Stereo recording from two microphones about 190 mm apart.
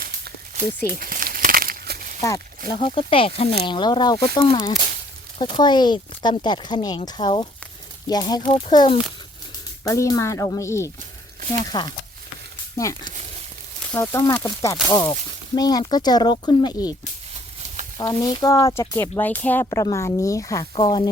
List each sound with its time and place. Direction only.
0.9 s a sound: 50° right (ahead or behind)
2.2 s speech: 15° left (ahead or behind)
2.9 s speech: 30° left (ahead or behind)
17.9 s speech: 20° left (ahead or behind)